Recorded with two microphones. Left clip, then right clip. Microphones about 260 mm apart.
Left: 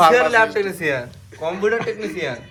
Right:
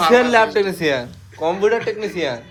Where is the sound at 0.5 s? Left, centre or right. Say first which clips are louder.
Right 3 dB; right.